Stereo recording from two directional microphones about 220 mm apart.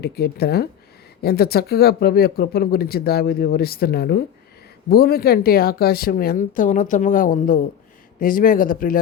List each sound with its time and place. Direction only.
0.0 s speech: 45° left (ahead or behind)